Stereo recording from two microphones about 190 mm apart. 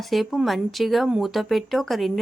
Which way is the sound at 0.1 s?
Centre (ahead or behind).